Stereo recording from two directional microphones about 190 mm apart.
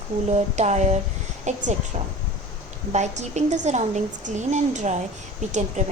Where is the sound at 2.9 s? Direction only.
35° right (ahead or behind).